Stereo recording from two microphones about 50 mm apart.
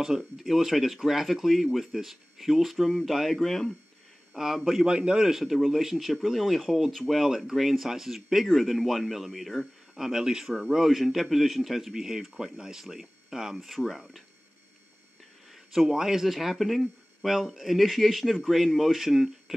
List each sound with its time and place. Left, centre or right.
0.2 s speech: centre
4.8 s speech: centre
5.3 s speech: centre
10.0 s speech: centre
15.7 s speech: centre